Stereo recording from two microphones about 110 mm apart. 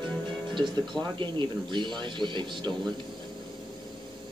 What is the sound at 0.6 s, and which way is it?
A man's voice, 45° right (ahead or behind).